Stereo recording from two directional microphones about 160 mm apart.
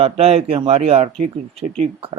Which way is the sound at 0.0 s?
40° right (ahead or behind).